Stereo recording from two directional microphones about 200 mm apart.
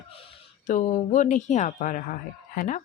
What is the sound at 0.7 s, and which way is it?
Speech, 35° left (ahead or behind).